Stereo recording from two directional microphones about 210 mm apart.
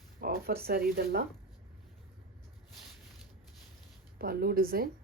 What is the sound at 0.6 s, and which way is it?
Speech, 45° right (ahead or behind).